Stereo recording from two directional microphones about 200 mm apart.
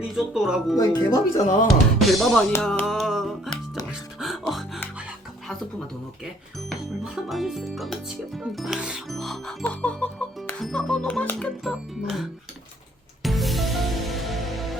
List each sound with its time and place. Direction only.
0.2 s speech: centre (ahead or behind)
0.8 s speech: 20° left (ahead or behind)
1.4 s speech: 40° left (ahead or behind)
2.0 s speech: centre (ahead or behind)
2.6 s music: centre (ahead or behind)
6.7 s speech: centre (ahead or behind)
8.4 s music: centre (ahead or behind)